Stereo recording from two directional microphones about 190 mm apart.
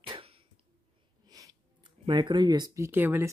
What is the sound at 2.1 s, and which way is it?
Speech, 25° right (ahead or behind).